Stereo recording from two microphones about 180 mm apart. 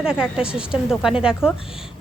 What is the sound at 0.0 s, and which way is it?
A woman's voice, 5° right (ahead or behind).